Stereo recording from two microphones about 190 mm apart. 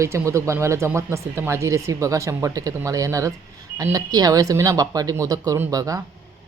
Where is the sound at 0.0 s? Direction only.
15° right (ahead or behind).